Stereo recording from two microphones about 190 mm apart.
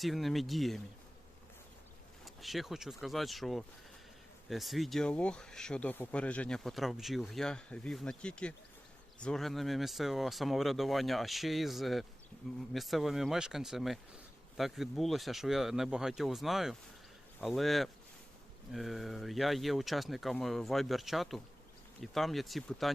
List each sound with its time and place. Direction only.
0.0 s speech: centre (ahead or behind)
2.2 s speech: centre (ahead or behind)